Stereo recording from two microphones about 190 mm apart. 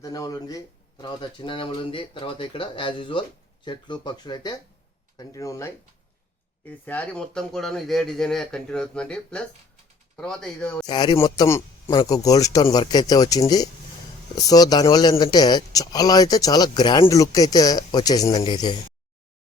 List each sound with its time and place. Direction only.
0.0 s a man's voice: 20° left (ahead or behind)
10.8 s a man's voice: 20° left (ahead or behind)